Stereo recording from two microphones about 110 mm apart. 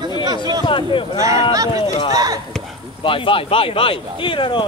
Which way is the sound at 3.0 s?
50° left (ahead or behind).